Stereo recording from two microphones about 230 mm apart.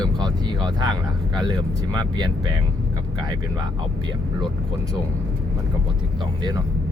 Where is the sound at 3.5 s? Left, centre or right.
Centre.